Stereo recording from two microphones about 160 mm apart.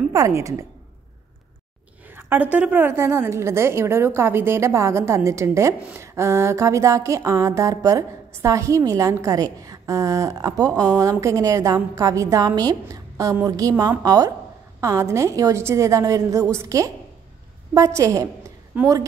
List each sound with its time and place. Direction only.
0.1 s a woman's voice: 20° right (ahead or behind)
2.0 s a woman's voice: 10° right (ahead or behind)